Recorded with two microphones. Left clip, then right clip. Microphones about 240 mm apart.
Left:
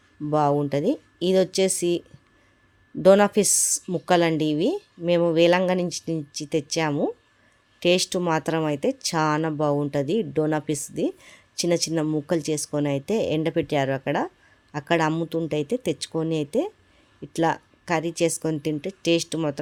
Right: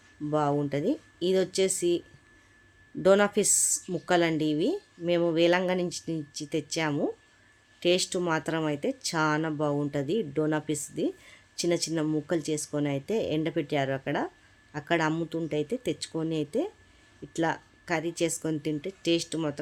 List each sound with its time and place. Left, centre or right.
0.3 s speech: left